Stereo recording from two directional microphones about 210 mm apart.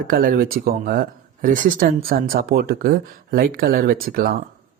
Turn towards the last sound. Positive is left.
turn(degrees=-45)  # may be behind; listen again after turning